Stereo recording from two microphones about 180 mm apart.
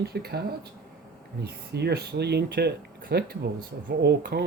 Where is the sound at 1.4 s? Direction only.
65° right (ahead or behind).